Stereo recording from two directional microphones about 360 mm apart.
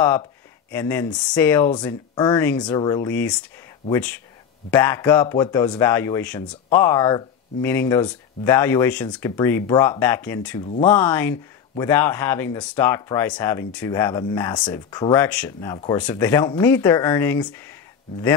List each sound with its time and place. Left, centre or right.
0.7 s speech: centre
10.6 s speech: centre
10.9 s speech: centre